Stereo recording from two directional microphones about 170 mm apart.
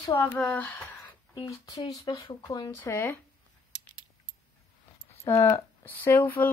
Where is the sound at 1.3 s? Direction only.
20° left (ahead or behind).